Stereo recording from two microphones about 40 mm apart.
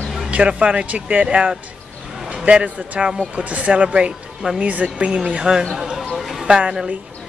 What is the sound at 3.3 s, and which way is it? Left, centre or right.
Speech, right.